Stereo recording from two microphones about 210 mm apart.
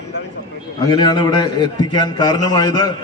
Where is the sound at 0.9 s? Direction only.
20° left (ahead or behind).